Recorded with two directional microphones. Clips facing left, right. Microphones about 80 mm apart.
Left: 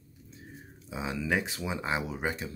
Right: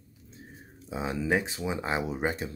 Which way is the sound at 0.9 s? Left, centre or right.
Right.